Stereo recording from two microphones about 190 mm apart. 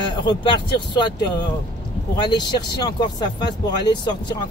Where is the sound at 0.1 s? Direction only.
25° left (ahead or behind).